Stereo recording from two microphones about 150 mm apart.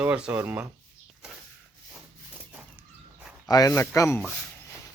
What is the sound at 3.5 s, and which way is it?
Speech, 25° left (ahead or behind).